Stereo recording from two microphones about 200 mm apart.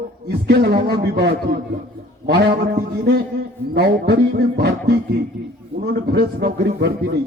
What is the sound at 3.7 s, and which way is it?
A man's voice, 55° right (ahead or behind).